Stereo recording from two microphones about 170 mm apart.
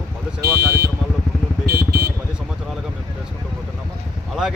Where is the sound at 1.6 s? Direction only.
65° right (ahead or behind).